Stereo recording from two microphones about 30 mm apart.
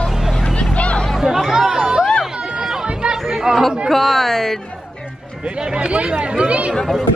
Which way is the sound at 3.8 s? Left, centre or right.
Centre.